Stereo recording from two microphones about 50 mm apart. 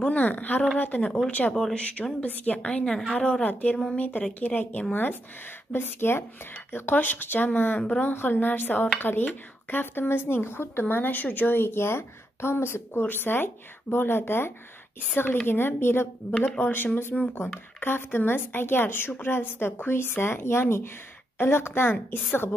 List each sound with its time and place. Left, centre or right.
0.1 s speech: left
1.0 s a woman's voice: left
1.5 s speech: centre
1.8 s a woman's voice: left
3.9 s speech: left
5.7 s speech: left
13.0 s speech: left